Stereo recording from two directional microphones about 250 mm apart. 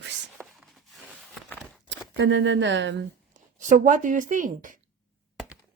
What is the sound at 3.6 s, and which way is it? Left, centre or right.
A woman's voice, right.